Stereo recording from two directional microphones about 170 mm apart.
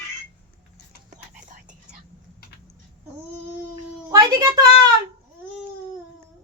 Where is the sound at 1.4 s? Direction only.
50° right (ahead or behind).